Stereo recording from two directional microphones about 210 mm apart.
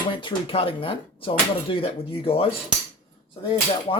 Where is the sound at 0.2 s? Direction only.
25° left (ahead or behind).